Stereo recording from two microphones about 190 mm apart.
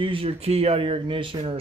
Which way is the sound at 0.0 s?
30° right (ahead or behind).